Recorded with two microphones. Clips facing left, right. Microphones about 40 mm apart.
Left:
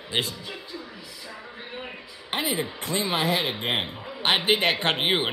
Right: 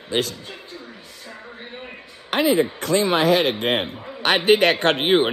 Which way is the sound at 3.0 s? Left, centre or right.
Right.